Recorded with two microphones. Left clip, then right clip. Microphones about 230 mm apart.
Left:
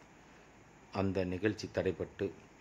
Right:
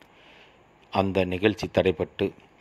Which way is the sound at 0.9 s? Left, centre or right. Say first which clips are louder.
Right 11 dB; centre.